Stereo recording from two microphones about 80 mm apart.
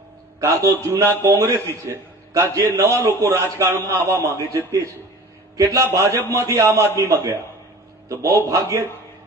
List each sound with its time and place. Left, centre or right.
0.3 s a man's voice: right